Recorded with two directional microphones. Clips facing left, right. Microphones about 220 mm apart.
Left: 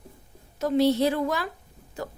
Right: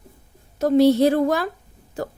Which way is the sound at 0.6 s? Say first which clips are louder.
Right 6 dB; 45° right (ahead or behind).